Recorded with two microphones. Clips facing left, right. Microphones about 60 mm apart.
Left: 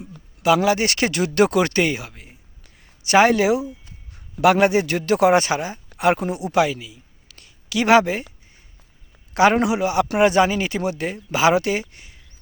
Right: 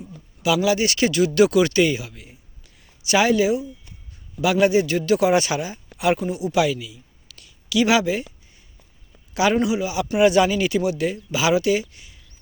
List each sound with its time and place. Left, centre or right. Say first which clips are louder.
0.4 s a man's voice: left 2 dB; left
6.2 s a man's voice: even; left
6.6 s a sound: left 2 dB; left
9.3 s a man's voice: left 4 dB; left
9.6 s a man's voice: left 3 dB; left
10.2 s speech: right 2 dB; left